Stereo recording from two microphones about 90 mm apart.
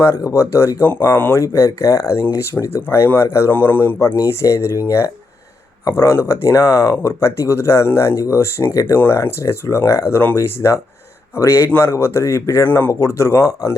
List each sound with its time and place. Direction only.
0.2 s speech: 35° left (ahead or behind)
0.9 s speech: 20° left (ahead or behind)
1.4 s speech: 35° left (ahead or behind)
12.6 s speech: 20° left (ahead or behind)
12.9 s speech: 30° left (ahead or behind)